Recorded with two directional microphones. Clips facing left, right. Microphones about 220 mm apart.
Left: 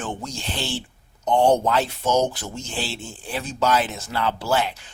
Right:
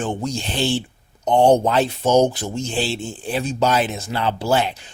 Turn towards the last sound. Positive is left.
turn(degrees=-20)  # may be behind; listen again after turning